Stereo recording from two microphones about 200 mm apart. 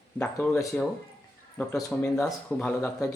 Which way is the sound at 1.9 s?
5° left (ahead or behind).